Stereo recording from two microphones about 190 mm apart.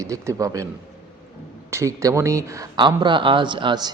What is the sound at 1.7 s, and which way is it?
Speech, 15° right (ahead or behind).